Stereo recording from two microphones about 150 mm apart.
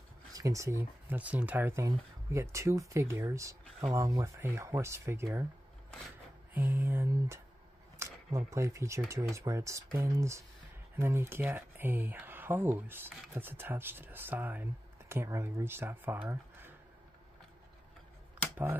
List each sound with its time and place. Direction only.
0.3 s speech: 20° right (ahead or behind)
6.5 s speech: 10° right (ahead or behind)